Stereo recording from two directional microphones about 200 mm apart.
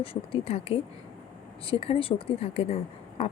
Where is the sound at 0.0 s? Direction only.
30° left (ahead or behind).